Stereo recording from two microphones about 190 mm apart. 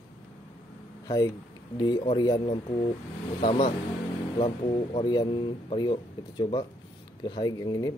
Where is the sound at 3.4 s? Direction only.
35° left (ahead or behind).